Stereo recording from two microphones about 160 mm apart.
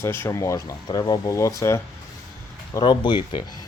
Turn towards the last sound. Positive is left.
turn(degrees=30)  # may be behind; listen again after turning